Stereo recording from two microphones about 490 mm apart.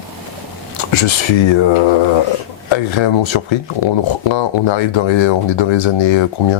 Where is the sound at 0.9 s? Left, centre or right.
Left.